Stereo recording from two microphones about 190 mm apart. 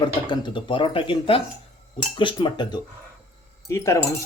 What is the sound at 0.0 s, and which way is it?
Speech, 25° left (ahead or behind).